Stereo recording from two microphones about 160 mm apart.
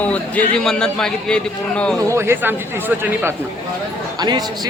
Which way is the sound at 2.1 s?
15° right (ahead or behind).